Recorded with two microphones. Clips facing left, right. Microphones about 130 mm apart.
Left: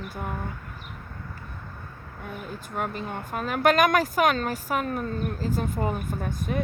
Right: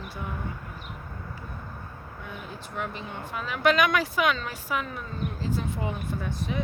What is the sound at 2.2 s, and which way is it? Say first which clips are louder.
Speech: left 4 dB; 50° left (ahead or behind).